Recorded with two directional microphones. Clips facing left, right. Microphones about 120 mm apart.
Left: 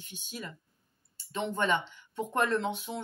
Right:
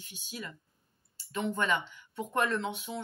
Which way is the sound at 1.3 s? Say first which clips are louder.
Left 1 dB; 30° left (ahead or behind).